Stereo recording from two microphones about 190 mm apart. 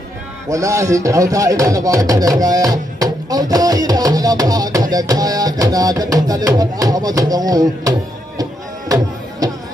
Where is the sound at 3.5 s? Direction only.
20° right (ahead or behind).